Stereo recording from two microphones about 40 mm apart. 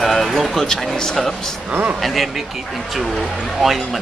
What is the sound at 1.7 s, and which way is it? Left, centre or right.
Speech, right.